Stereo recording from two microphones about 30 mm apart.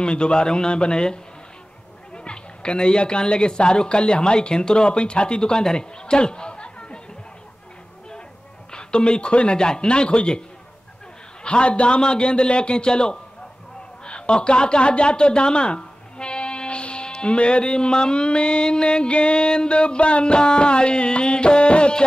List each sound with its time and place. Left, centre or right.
0.0 s speech: left
5.8 s chatter: left
8.7 s speech: left
11.4 s speech: left